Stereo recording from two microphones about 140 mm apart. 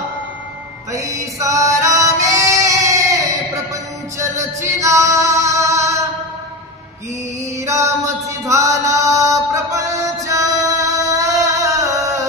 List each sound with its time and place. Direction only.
0.9 s music: 20° right (ahead or behind)
7.6 s chant: 20° right (ahead or behind)
10.2 s female singing: 25° right (ahead or behind)